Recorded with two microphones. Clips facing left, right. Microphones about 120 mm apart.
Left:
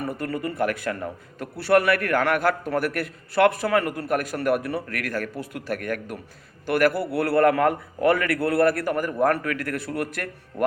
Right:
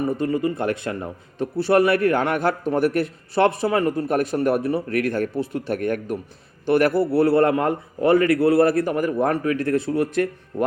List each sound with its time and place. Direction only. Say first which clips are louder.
0.0 s a man's voice: right 6 dB; 20° right (ahead or behind)